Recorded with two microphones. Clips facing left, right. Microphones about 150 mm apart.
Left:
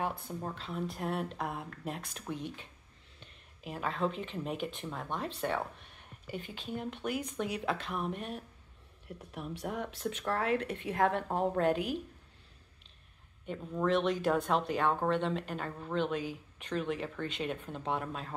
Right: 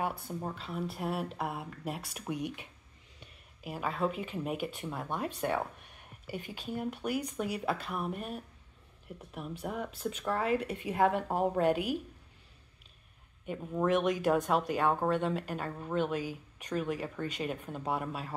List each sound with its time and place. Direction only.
0.0 s speech: 5° right (ahead or behind)
13.5 s speech: 10° right (ahead or behind)